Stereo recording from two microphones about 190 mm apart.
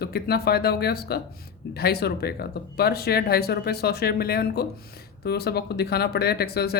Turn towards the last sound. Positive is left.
turn(degrees=55)  # may be behind; listen again after turning